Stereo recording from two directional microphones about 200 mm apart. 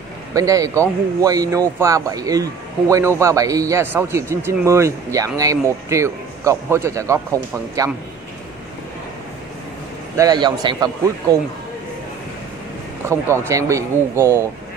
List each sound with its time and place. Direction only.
0.3 s a man's voice: 15° right (ahead or behind)
10.1 s a man's voice: 20° right (ahead or behind)
13.0 s a man's voice: 15° right (ahead or behind)